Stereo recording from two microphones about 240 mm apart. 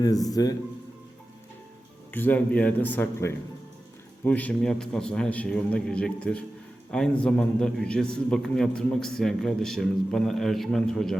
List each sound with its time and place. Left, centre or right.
0.3 s speech: centre
2.1 s a man's voice: centre